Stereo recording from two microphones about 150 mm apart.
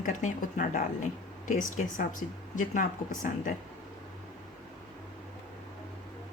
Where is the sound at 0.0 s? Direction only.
55° left (ahead or behind).